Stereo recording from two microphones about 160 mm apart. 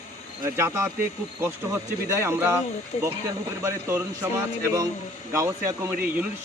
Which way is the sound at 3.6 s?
15° right (ahead or behind).